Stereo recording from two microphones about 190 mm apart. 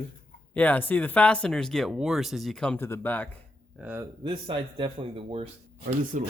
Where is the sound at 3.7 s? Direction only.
10° right (ahead or behind).